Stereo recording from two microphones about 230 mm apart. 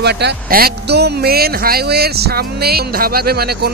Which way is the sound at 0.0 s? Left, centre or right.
Right.